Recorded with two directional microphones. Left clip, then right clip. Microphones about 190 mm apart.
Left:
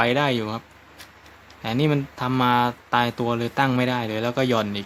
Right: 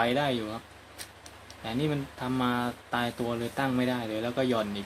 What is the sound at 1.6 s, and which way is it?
Speech, 40° left (ahead or behind).